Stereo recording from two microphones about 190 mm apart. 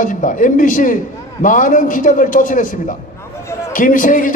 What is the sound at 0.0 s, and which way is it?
A man's voice, 45° left (ahead or behind).